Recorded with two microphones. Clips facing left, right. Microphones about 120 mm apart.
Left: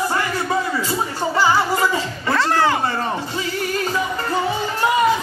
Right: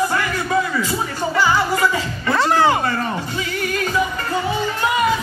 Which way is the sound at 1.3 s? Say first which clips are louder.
Even; 25° left (ahead or behind).